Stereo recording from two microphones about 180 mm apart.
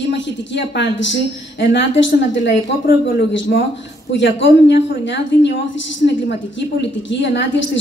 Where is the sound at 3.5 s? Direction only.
60° left (ahead or behind).